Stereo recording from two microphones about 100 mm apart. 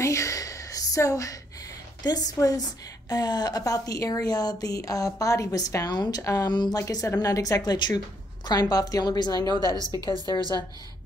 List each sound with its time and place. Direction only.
0.0 s a sound: 30° left (ahead or behind)
2.0 s a woman's voice: 40° left (ahead or behind)
9.6 s a woman's voice: 40° right (ahead or behind)